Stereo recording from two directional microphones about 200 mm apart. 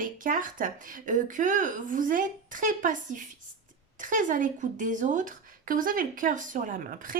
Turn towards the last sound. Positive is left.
turn(degrees=-45)  # may be behind; listen again after turning